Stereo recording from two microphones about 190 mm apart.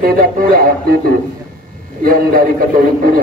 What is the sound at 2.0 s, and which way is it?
Speech, 45° right (ahead or behind).